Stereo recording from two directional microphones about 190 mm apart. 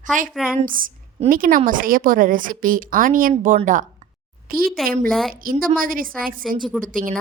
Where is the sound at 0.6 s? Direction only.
45° right (ahead or behind).